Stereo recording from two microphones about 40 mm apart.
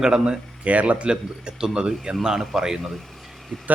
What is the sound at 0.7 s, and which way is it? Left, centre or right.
Speech, right.